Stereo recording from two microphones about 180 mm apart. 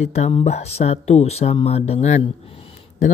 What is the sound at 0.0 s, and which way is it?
Speech, 35° left (ahead or behind).